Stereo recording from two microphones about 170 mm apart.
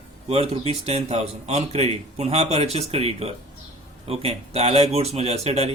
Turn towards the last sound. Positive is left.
turn(degrees=-40)  # may be behind; listen again after turning